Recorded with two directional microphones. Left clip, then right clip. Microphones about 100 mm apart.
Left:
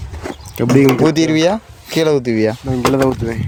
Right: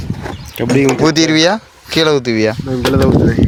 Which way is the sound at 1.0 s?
20° left (ahead or behind).